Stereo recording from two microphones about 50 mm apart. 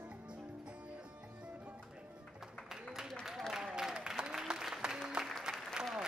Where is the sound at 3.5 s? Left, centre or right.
Centre.